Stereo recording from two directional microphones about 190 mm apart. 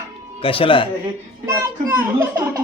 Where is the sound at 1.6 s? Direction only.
10° right (ahead or behind).